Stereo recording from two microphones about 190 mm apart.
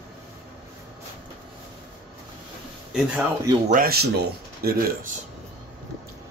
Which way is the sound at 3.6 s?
50° right (ahead or behind).